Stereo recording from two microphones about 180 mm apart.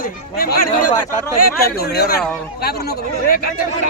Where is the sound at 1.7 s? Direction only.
60° left (ahead or behind).